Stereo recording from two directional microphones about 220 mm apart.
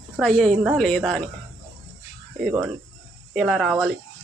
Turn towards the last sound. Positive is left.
turn(degrees=0)  # may be behind; listen again after turning